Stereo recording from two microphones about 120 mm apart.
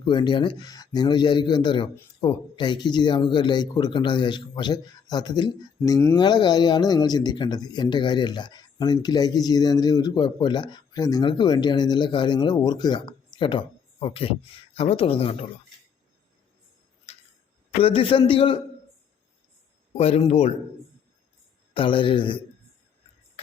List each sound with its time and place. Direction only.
0.0 s speech: 40° left (ahead or behind); by 6.1 s 25° left (ahead or behind)
6.1 s speech: 35° left (ahead or behind)
17.1 s a sound: 55° left (ahead or behind)
17.7 s a man's voice: 50° left (ahead or behind)
19.9 s speech: 55° left (ahead or behind)
21.8 s a man's voice: 45° left (ahead or behind)